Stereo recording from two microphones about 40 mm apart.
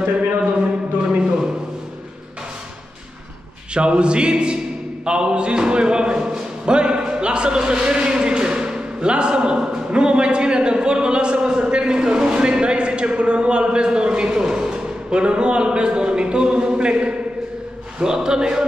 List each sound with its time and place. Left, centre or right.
3.7 s a man's voice: right